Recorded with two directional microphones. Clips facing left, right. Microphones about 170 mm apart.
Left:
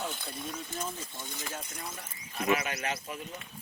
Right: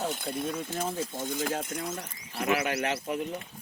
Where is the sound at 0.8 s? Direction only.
90° right; by 3.2 s 65° right (ahead or behind).